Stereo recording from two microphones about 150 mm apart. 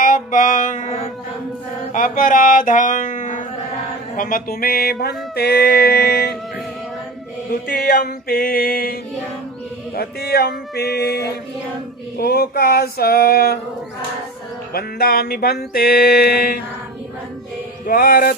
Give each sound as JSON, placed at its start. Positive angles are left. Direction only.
{"t": 0.0, "sound": "music", "side_deg": 65}
{"t": 1.9, "sound": "mantra", "side_deg": 65}
{"t": 4.2, "sound": "mantra", "side_deg": 75}
{"t": 7.5, "sound": "a sound", "side_deg": 75}
{"t": 9.9, "sound": "mantra", "side_deg": 90}
{"t": 14.7, "sound": "mantra", "side_deg": 90}
{"t": 17.8, "sound": "a sound", "side_deg": 75}